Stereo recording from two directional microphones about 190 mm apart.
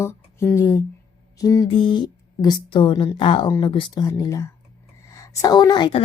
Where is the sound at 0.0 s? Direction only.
15° left (ahead or behind).